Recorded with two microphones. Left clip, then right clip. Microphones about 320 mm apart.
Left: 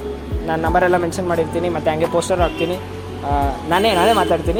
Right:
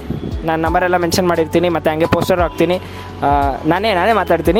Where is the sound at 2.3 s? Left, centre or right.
Right.